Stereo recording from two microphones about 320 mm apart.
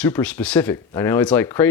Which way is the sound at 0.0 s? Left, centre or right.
Centre.